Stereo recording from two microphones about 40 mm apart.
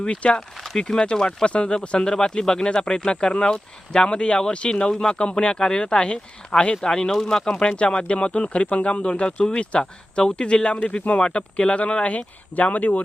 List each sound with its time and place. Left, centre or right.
0.0 s speech: left
1.5 s speech: left
12.1 s speech: left